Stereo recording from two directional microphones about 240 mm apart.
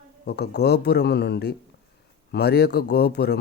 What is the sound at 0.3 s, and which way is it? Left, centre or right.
A man's voice, left.